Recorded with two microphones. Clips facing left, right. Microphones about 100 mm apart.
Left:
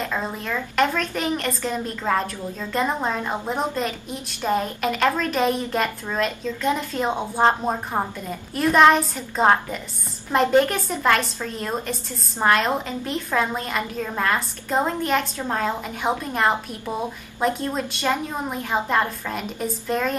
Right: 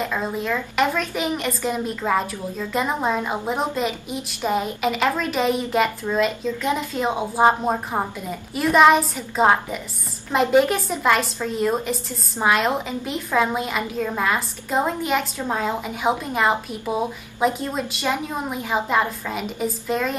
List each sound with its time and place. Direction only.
0.0 s a woman's voice: 5° right (ahead or behind)